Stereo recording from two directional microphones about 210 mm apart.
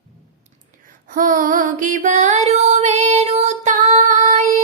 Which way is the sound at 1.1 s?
40° right (ahead or behind).